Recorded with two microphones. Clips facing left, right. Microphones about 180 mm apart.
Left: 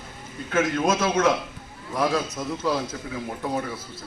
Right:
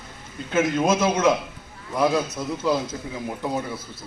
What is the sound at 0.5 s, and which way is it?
A man's voice, 20° right (ahead or behind).